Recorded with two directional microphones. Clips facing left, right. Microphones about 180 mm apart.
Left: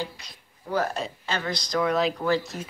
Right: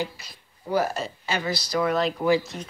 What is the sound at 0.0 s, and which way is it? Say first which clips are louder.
Speech: right 3 dB; 10° right (ahead or behind).